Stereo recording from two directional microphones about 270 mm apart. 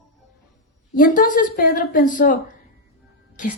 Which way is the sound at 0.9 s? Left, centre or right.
Left.